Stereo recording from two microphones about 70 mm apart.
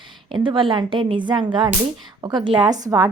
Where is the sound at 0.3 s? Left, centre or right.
Right.